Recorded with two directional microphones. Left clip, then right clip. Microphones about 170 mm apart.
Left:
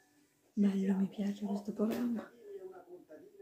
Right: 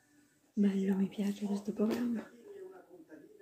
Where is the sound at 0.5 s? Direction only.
10° left (ahead or behind).